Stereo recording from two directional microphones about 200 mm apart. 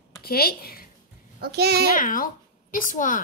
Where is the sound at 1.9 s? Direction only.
40° left (ahead or behind).